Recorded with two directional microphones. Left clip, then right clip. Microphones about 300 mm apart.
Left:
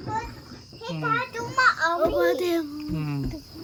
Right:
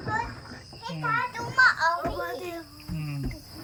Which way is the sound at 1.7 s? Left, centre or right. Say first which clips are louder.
Left 4 dB; left.